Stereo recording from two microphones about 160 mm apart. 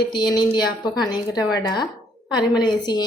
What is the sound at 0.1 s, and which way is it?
A woman's voice, 25° left (ahead or behind).